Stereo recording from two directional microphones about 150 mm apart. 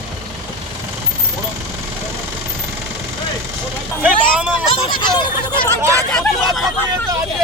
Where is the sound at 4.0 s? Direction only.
5° right (ahead or behind).